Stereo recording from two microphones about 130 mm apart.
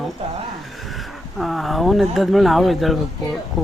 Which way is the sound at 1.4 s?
Centre (ahead or behind).